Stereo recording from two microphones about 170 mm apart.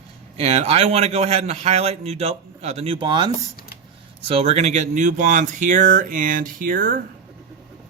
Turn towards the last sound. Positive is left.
turn(degrees=-55)  # may be behind; listen again after turning